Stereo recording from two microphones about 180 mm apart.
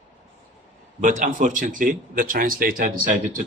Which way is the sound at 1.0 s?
45° right (ahead or behind).